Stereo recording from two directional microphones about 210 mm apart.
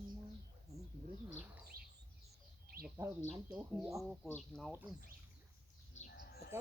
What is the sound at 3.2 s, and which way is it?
Speech, centre (ahead or behind).